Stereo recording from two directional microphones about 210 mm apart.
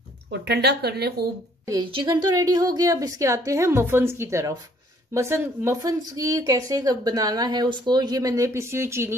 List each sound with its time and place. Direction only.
0.3 s speech: 50° right (ahead or behind)
1.7 s speech: 20° right (ahead or behind)